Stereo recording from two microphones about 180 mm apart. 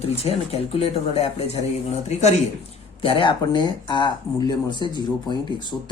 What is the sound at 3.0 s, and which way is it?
Speech, 30° left (ahead or behind).